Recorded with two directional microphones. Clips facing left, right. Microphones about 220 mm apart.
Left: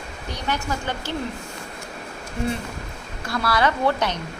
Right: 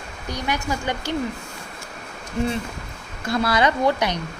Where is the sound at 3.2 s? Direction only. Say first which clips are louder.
Right 2 dB; 20° right (ahead or behind).